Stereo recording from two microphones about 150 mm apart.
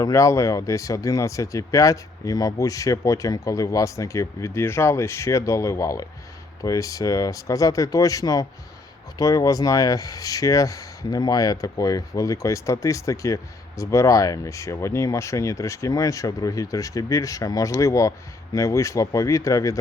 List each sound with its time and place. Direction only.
0.0 s speech: 20° left (ahead or behind)